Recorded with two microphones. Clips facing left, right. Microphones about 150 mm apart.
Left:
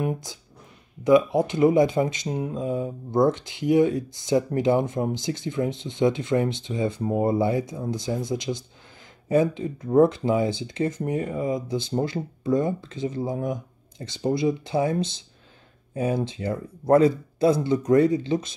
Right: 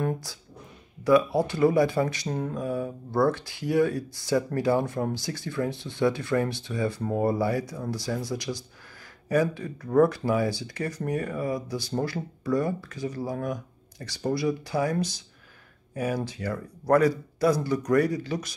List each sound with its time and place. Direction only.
0.0 s speech: 15° left (ahead or behind)